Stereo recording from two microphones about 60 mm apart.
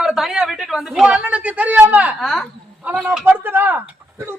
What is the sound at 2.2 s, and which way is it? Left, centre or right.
Speech, centre.